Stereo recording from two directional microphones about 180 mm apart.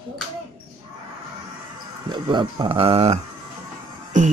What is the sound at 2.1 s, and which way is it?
Speech, 25° right (ahead or behind).